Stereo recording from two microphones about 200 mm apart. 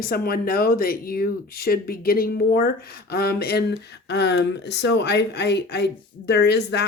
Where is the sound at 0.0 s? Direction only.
45° left (ahead or behind).